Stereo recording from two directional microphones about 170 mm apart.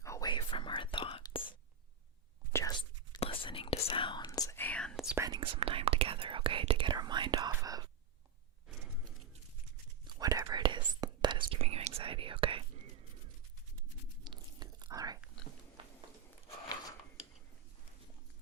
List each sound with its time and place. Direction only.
0.0 s whispering: 20° left (ahead or behind)
2.5 s whispering: 15° left (ahead or behind)
3.2 s whispering: 35° left (ahead or behind); by 5.1 s centre (ahead or behind)
5.1 s whispering: 20° right (ahead or behind)
5.4 s whispering: 30° right (ahead or behind)
10.2 s whispering: 20° right (ahead or behind)
14.3 s biting: 25° right (ahead or behind)
15.8 s a sound: 30° right (ahead or behind)